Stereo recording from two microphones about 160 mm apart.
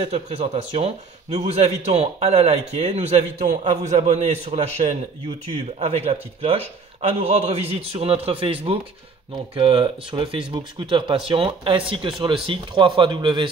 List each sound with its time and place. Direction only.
0.0 s a man's voice: 40° right (ahead or behind)